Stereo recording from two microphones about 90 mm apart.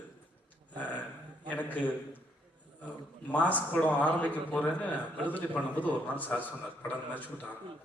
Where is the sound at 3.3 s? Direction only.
15° left (ahead or behind).